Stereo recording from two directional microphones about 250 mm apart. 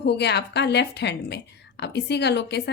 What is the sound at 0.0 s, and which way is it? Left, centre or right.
A woman's voice, left.